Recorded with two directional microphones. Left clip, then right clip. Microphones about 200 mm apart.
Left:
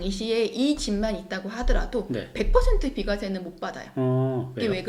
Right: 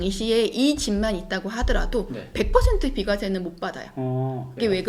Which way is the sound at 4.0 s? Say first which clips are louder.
Left 5 dB; 55° left (ahead or behind).